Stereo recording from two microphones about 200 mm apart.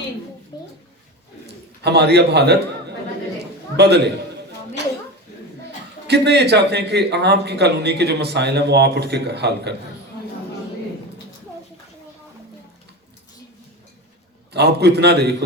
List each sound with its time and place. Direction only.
1.8 s a man's voice: 55° right (ahead or behind)
6.1 s a man's voice: 55° right (ahead or behind)
14.5 s a man's voice: 55° right (ahead or behind)